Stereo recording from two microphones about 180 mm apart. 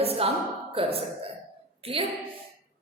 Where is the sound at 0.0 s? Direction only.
35° right (ahead or behind).